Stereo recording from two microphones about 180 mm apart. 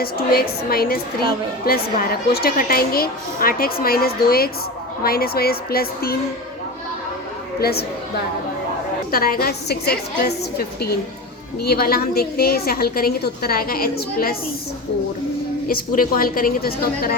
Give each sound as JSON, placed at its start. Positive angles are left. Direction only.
{"t": 0.0, "sound": "a woman's voice", "side_deg": 55}
{"t": 7.6, "sound": "a woman's voice", "side_deg": 60}
{"t": 9.1, "sound": "a woman's voice", "side_deg": 55}
{"t": 15.6, "sound": "a woman's voice", "side_deg": 50}